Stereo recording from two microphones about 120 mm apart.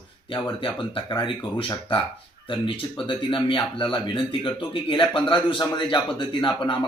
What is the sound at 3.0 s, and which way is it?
Speech, 45° left (ahead or behind).